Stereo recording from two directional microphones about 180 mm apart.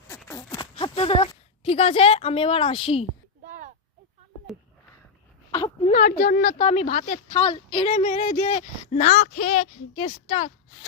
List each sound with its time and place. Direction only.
0.5 s speech: 30° left (ahead or behind)
5.5 s a sound: 20° left (ahead or behind)
5.8 s a woman's voice: 40° left (ahead or behind)
6.6 s speech: 35° left (ahead or behind)
7.3 s speech: 30° left (ahead or behind)